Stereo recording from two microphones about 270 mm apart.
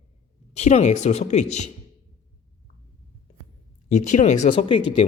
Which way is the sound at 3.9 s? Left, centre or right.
Left.